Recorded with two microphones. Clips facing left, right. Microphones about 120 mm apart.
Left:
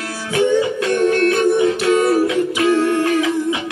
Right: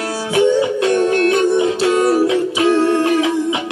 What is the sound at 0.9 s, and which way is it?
Music, 20° right (ahead or behind).